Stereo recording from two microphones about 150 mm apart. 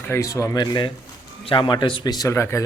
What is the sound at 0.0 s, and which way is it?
A man's voice, 20° left (ahead or behind).